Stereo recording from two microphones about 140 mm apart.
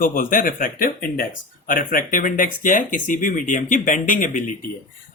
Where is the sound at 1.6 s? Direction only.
75° left (ahead or behind).